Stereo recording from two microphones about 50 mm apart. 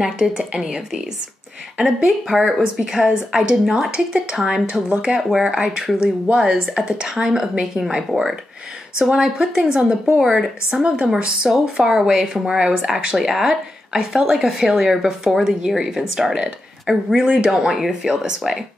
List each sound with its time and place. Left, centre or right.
0.0 s speech: centre
4.4 s speech: centre
4.6 s speech: centre